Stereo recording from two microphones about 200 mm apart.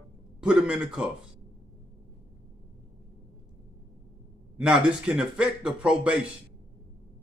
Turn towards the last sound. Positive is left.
turn(degrees=-5)  # may be behind; listen again after turning